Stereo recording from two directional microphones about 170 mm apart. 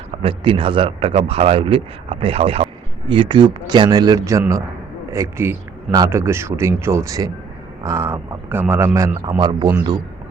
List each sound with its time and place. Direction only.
0.2 s a man's voice: 30° right (ahead or behind)